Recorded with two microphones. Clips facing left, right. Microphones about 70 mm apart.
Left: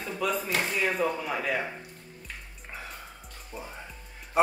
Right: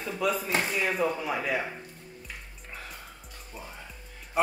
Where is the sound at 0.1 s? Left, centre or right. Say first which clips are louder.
Right 1 dB; centre.